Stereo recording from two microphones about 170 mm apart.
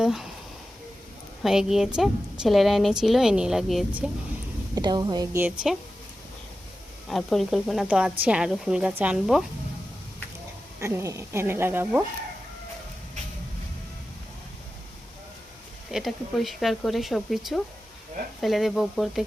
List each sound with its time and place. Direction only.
0.0 s a sound: centre (ahead or behind)
1.4 s a woman's voice: centre (ahead or behind)
4.7 s speech: 25° right (ahead or behind)
7.1 s a woman's voice: centre (ahead or behind)
10.8 s speech: 15° right (ahead or behind)
15.9 s a woman's voice: centre (ahead or behind)